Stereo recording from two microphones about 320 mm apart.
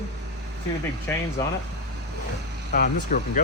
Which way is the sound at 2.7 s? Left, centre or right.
Left.